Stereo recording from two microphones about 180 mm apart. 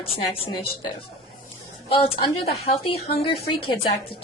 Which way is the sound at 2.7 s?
60° left (ahead or behind).